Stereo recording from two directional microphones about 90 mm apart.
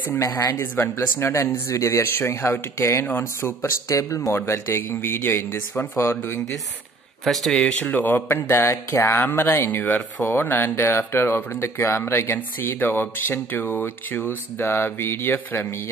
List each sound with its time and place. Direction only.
0.2 s speech: 30° left (ahead or behind)
3.9 s speech: 35° left (ahead or behind)
7.2 s speech: centre (ahead or behind)
7.9 s speech: 20° left (ahead or behind)